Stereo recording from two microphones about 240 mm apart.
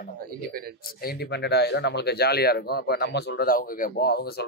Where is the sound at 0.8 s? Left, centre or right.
Left.